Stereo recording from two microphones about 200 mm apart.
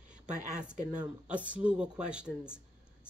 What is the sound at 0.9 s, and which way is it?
Speech, 5° right (ahead or behind).